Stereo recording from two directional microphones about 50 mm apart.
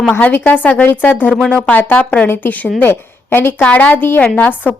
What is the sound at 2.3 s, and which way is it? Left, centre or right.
Speech, left.